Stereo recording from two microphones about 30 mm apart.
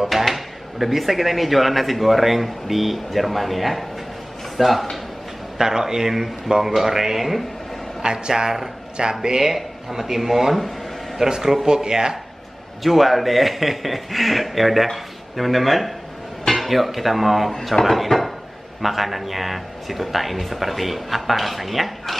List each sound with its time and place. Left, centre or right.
0.1 s speech: centre
5.6 s speech: centre
8.0 s speech: right
9.4 s speech: centre
11.2 s speech: right
12.8 s speech: centre